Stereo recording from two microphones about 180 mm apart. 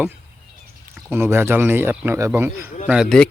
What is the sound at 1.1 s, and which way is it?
Speech, 10° right (ahead or behind).